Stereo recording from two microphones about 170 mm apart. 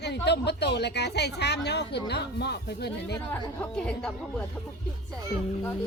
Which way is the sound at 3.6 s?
5° left (ahead or behind).